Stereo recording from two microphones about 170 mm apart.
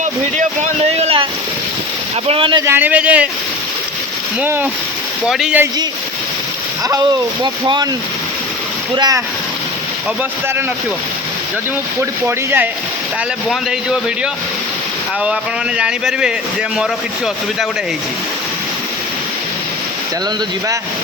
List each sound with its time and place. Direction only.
0.0 s a sound: 45° right (ahead or behind)
2.2 s speech: 30° right (ahead or behind)
2.6 s a man's voice: 10° right (ahead or behind)
4.4 s a man's voice: 10° right (ahead or behind)
7.4 s speech: 25° right (ahead or behind)
9.0 s speech: 20° right (ahead or behind)
12.2 s a man's voice: 15° right (ahead or behind)
13.5 s a man's voice: centre (ahead or behind)
15.8 s a man's voice: 5° right (ahead or behind)